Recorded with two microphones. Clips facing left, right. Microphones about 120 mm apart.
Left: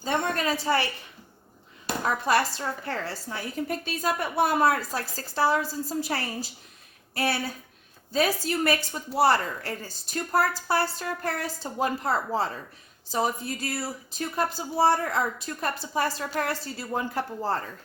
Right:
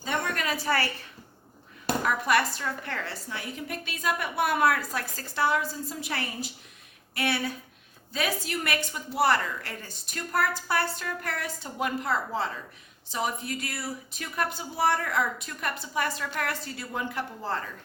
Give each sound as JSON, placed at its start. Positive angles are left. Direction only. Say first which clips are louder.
{"t": 0.3, "sound": "a woman's voice", "louder": "left 3 dB", "side_deg": 30}
{"t": 2.0, "sound": "a woman's voice", "louder": "left 2 dB", "side_deg": 30}